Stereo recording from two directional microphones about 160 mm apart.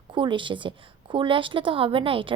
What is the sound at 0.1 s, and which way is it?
A woman's voice, 30° right (ahead or behind).